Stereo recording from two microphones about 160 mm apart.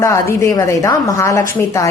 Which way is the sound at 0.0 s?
20° left (ahead or behind).